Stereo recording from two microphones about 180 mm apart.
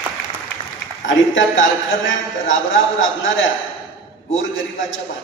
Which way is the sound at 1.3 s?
90° left.